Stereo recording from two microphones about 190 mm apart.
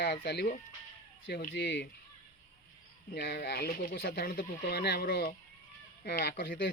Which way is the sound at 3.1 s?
60° left (ahead or behind).